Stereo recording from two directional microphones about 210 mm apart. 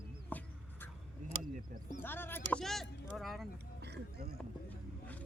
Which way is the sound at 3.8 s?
55° right (ahead or behind).